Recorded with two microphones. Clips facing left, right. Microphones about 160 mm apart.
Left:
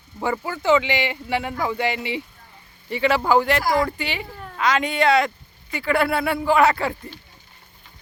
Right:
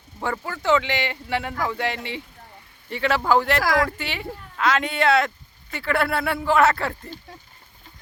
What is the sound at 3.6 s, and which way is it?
Speech, 90° right.